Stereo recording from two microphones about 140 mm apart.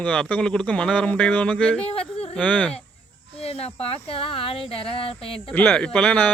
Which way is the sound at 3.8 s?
45° left (ahead or behind).